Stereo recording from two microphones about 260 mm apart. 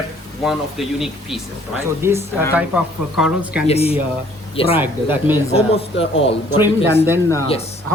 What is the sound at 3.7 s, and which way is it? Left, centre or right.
Speech, left.